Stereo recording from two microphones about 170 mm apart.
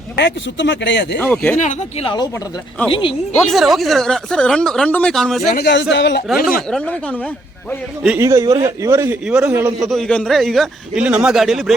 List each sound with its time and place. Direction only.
0.2 s speech: 90° left
1.2 s speech: 10° left (ahead or behind)
1.5 s speech: 45° left (ahead or behind)
2.9 s speech: 30° left (ahead or behind)
3.3 s speech: centre (ahead or behind)
5.5 s a man's voice: 80° left
6.6 s speech: 5° left (ahead or behind)
8.0 s a man's voice: 15° right (ahead or behind)
9.2 s speech: 5° right (ahead or behind)
9.5 s a man's voice: 15° right (ahead or behind)
9.8 s speech: centre (ahead or behind)